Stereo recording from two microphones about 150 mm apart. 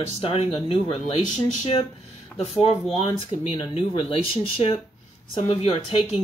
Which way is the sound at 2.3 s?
40° left (ahead or behind).